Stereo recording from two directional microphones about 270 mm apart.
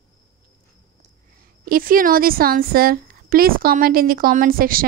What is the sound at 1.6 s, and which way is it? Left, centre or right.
A woman's voice, right.